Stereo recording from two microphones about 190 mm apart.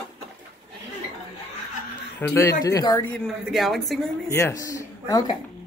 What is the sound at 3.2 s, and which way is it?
Speech, centre (ahead or behind).